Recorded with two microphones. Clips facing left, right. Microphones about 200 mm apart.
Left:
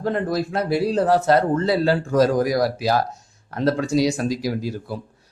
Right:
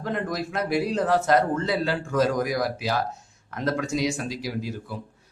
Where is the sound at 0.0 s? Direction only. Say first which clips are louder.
Left 6 dB; 35° left (ahead or behind).